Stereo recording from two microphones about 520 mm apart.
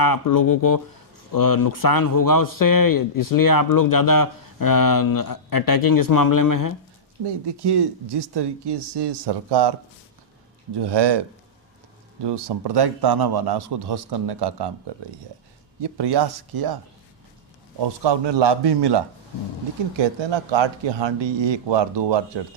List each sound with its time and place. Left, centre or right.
0.0 s speech: left
7.3 s a man's voice: right
10.8 s a man's voice: right
12.2 s a man's voice: right
15.8 s a man's voice: right
17.7 s a man's voice: right